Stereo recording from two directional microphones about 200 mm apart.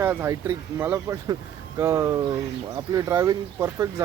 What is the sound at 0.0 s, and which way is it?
Speech, 10° right (ahead or behind).